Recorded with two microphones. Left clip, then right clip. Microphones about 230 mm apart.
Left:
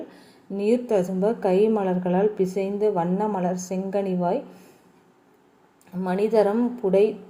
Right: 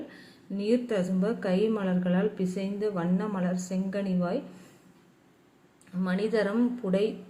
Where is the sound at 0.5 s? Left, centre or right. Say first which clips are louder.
Left 6 dB; centre.